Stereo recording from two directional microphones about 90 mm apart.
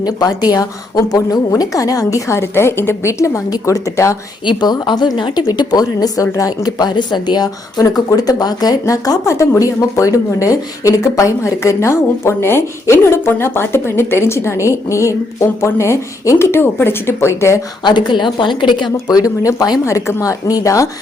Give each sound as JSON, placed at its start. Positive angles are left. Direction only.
{"t": 0.0, "sound": "speech", "side_deg": 45}
{"t": 4.4, "sound": "a woman's voice", "side_deg": 55}
{"t": 17.8, "sound": "speech", "side_deg": 60}
{"t": 19.8, "sound": "speech", "side_deg": 30}